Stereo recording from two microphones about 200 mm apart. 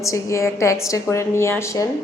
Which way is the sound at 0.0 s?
15° left (ahead or behind).